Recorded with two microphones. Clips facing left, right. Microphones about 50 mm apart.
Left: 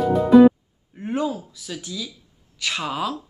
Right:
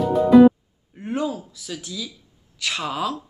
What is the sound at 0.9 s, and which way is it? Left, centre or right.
Speech, centre.